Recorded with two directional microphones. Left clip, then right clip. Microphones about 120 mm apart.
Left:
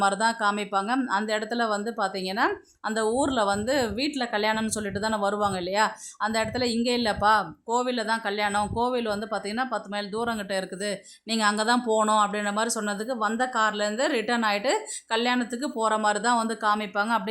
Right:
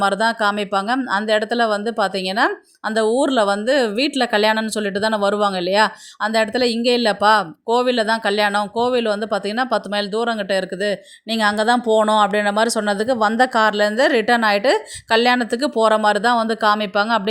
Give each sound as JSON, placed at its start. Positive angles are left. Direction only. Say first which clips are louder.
{"t": 0.0, "sound": "speech", "louder": "right 6 dB", "side_deg": -30}